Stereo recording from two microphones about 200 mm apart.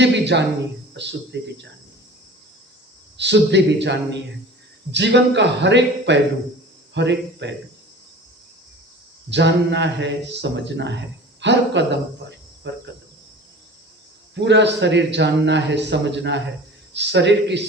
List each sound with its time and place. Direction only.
0.0 s speech: 60° right (ahead or behind)
3.2 s speech: 60° right (ahead or behind)
9.3 s speech: 60° right (ahead or behind)
12.3 s cricket: 60° right (ahead or behind)
14.3 s speech: 60° right (ahead or behind)